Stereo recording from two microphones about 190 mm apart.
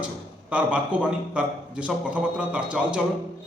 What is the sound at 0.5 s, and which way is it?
A man's voice, 5° right (ahead or behind).